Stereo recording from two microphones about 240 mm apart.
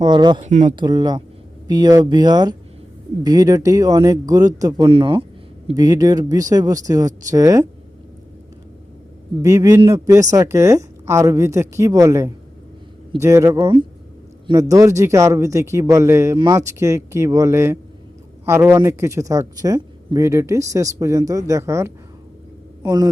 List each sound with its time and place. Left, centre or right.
0.0 s speech: centre
0.4 s speech: right
0.8 s speech: centre
9.4 s a man's voice: centre